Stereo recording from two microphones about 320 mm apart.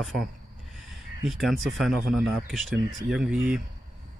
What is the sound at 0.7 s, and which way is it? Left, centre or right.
Speech, centre.